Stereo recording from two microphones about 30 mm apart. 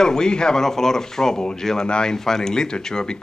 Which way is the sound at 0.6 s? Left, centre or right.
Centre.